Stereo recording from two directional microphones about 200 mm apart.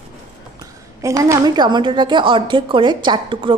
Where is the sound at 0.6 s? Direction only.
15° right (ahead or behind).